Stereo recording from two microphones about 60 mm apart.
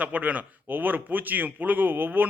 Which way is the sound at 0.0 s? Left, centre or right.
Right.